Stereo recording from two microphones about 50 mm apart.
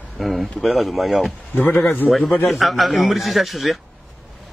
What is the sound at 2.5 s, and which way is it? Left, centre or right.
Speech, centre.